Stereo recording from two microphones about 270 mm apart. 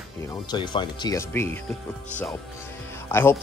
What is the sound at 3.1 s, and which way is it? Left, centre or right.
Speech, centre.